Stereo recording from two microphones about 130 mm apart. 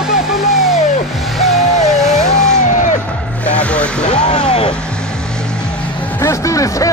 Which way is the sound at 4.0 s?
65° left (ahead or behind).